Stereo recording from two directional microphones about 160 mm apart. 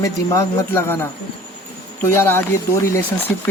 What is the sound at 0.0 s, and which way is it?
Speech, 20° left (ahead or behind).